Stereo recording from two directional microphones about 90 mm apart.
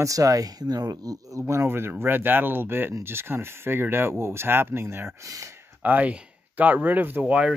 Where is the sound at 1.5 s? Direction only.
30° right (ahead or behind).